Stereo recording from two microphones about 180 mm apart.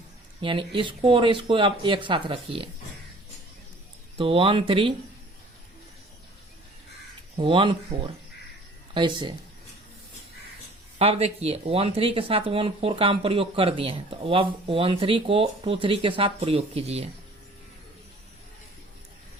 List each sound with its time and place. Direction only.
0.4 s speech: 30° right (ahead or behind)
4.2 s speech: 30° right (ahead or behind)
7.3 s speech: 30° right (ahead or behind)
10.9 s speech: 35° right (ahead or behind)